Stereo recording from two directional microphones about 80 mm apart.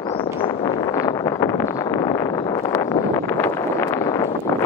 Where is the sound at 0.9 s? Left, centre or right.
Left.